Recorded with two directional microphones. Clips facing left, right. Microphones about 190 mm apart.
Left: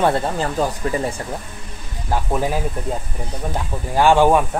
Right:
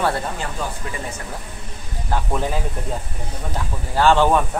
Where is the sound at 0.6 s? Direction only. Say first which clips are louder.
Left 9 dB; 40° left (ahead or behind).